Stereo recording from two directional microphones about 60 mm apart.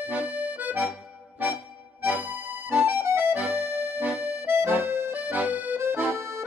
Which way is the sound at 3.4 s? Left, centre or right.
Right.